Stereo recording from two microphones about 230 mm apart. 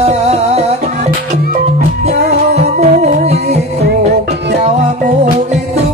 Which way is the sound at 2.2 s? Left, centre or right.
Right.